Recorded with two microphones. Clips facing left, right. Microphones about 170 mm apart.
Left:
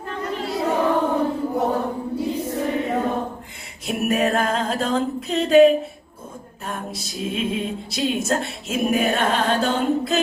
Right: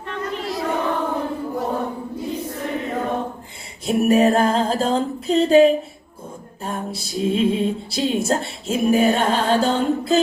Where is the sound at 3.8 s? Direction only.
30° right (ahead or behind).